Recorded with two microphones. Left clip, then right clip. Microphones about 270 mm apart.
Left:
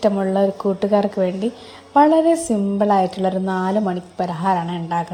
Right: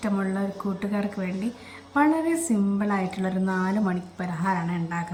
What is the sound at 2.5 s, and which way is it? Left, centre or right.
A woman's voice, centre.